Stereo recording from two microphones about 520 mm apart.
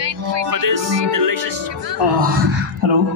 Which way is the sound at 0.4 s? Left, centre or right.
Right.